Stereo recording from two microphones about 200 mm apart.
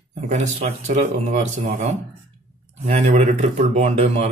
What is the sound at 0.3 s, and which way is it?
Mantra, 35° right (ahead or behind).